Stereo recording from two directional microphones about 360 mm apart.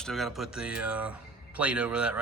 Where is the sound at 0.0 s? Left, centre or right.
Centre.